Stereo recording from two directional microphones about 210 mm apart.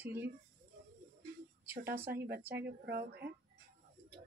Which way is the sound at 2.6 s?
50° right (ahead or behind).